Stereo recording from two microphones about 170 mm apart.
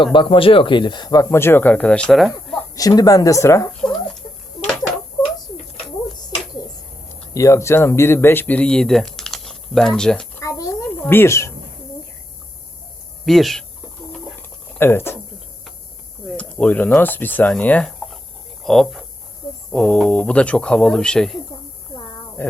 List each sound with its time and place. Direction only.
0.0 s speech: 30° left (ahead or behind); by 2.6 s centre (ahead or behind)
2.6 s speech: 20° left (ahead or behind)
7.1 s speech: 15° left (ahead or behind)
10.4 s a sound: 20° left (ahead or behind)
11.0 s speech: 15° left (ahead or behind)
13.2 s speech: centre (ahead or behind)
14.8 s speech: 15° left (ahead or behind)
16.4 s speech: 10° left (ahead or behind)
22.4 s dog: 10° left (ahead or behind)